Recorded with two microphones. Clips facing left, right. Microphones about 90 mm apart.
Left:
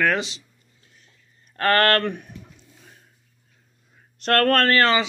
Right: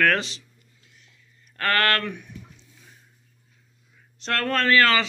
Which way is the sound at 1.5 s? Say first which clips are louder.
Left 4 dB; 35° left (ahead or behind).